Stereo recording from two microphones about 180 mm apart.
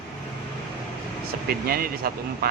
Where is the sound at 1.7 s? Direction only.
55° right (ahead or behind).